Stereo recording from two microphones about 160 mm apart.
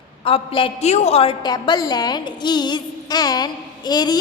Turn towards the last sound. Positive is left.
turn(degrees=25)  # may be behind; listen again after turning